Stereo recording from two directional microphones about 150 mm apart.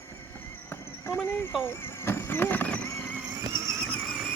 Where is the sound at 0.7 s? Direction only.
15° left (ahead or behind).